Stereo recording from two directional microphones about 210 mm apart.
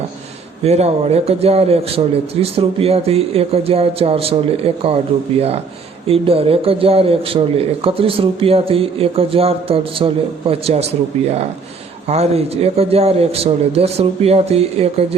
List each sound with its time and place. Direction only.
0.6 s speech: 30° right (ahead or behind)
6.1 s speech: 25° right (ahead or behind)
12.0 s speech: 30° right (ahead or behind)